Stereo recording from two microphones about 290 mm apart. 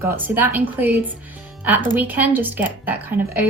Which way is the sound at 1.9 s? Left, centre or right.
Centre.